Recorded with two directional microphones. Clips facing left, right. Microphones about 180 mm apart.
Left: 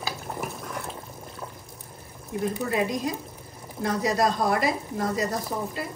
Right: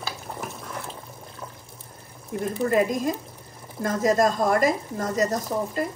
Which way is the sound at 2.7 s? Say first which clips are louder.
Right 7 dB; 50° right (ahead or behind).